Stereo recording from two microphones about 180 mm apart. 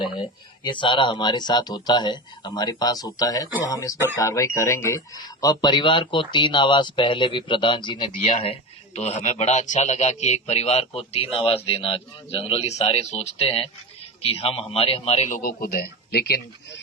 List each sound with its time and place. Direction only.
0.0 s a man's voice: 25° left (ahead or behind)
15.4 s a man's voice: 50° left (ahead or behind)